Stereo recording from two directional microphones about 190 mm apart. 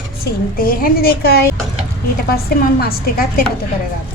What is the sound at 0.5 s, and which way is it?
A woman's voice, 50° left (ahead or behind).